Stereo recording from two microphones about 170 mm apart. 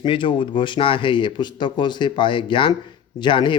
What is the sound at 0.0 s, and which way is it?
Speech, 30° left (ahead or behind).